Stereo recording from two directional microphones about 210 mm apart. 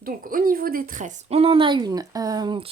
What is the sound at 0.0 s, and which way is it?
Speech, 40° right (ahead or behind).